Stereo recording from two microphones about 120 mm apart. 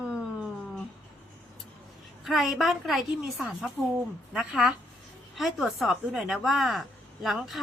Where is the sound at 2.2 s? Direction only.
Centre (ahead or behind).